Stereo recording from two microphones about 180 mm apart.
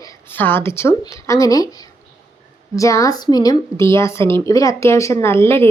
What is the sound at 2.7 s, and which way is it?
A woman's voice, 20° left (ahead or behind).